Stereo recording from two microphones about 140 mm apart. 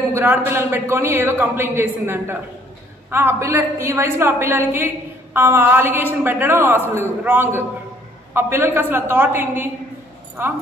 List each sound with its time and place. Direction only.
0.1 s a woman's voice: 15° right (ahead or behind)